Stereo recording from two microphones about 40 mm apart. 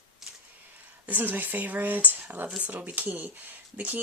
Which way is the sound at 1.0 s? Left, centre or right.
Right.